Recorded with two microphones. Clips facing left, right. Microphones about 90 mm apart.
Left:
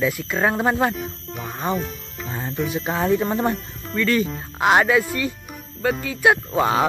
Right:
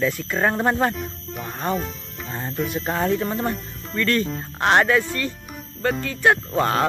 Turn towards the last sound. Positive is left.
turn(degrees=10)  # may be behind; listen again after turning